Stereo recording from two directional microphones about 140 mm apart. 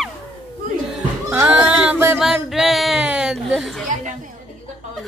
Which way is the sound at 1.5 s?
5° right (ahead or behind).